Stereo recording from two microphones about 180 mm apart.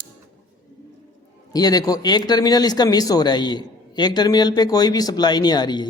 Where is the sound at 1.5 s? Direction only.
20° left (ahead or behind).